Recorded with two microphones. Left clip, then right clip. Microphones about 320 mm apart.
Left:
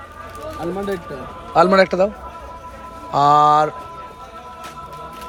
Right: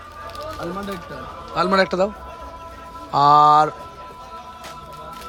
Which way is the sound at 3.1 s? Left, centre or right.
Centre.